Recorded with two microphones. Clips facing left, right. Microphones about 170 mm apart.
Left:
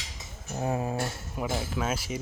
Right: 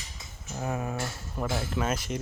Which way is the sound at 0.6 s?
30° left (ahead or behind).